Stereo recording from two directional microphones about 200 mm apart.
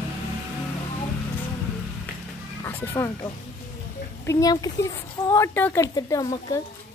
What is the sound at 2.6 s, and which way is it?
A woman's voice, 10° left (ahead or behind).